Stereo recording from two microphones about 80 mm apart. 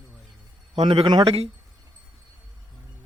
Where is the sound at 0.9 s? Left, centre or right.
Right.